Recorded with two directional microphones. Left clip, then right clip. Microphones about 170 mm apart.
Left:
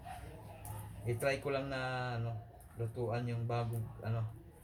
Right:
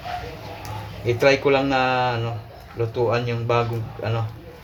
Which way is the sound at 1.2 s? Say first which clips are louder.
Right 18 dB; 30° right (ahead or behind).